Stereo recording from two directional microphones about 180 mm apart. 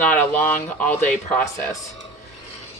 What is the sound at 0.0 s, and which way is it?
Speech, 10° left (ahead or behind).